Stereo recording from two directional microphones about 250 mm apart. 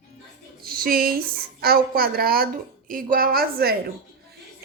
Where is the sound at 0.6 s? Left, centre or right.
Right.